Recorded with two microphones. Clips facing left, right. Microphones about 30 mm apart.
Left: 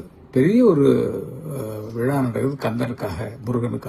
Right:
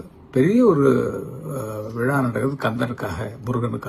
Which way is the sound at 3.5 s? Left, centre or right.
Right.